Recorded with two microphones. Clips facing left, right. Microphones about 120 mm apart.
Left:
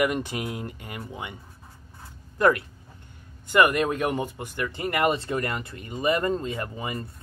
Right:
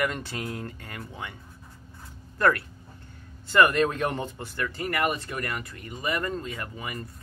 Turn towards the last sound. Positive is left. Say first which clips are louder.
# left 4 dB
turn(degrees=25)  # may be behind; listen again after turning